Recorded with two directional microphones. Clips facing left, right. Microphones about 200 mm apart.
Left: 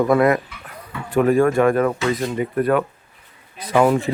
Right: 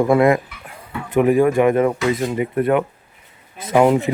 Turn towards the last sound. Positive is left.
turn(degrees=-20)  # may be behind; listen again after turning